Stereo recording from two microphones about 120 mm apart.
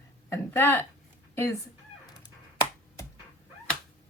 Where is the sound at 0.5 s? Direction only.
20° left (ahead or behind).